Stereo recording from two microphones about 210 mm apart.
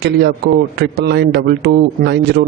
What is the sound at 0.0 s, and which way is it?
A man's voice, 50° right (ahead or behind).